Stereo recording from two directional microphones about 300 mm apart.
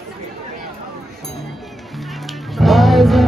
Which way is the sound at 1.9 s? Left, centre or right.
Centre.